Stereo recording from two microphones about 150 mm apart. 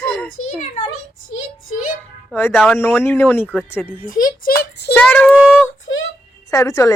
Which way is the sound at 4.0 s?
65° left (ahead or behind).